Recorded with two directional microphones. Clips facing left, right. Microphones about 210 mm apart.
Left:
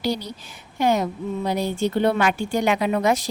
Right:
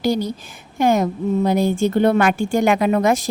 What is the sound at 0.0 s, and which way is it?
Speech, 50° right (ahead or behind).